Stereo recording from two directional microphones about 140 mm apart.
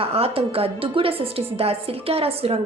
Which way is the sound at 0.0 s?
45° right (ahead or behind).